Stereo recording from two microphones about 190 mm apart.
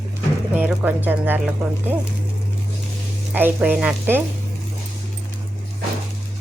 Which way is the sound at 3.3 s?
10° right (ahead or behind).